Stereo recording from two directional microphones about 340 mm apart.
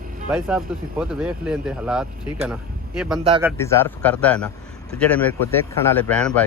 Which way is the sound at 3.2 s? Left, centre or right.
Centre.